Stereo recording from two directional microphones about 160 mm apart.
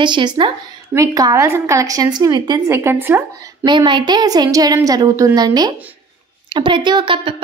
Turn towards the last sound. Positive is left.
turn(degrees=-35)  # may be behind; listen again after turning